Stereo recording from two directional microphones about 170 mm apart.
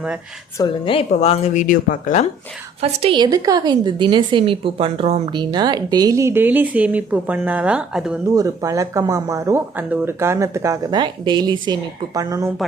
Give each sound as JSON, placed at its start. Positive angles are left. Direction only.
{"t": 0.6, "sound": "speech", "side_deg": 30}
{"t": 2.8, "sound": "a woman's voice", "side_deg": -35}
{"t": 8.4, "sound": "a woman's voice", "side_deg": -20}